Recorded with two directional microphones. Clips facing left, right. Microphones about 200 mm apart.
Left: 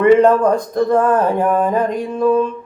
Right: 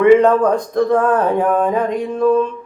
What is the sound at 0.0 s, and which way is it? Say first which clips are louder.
Speech: even; 5° left (ahead or behind).